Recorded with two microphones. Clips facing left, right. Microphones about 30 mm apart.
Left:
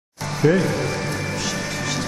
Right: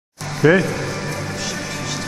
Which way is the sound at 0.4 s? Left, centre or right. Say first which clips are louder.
Right 4 dB; right.